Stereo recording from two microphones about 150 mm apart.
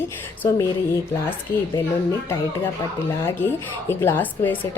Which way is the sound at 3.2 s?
15° left (ahead or behind).